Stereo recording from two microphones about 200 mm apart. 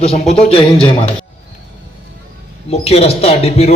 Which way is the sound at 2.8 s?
30° left (ahead or behind).